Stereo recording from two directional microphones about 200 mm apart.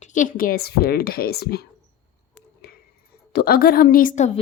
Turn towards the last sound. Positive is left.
turn(degrees=40)  # may be behind; listen again after turning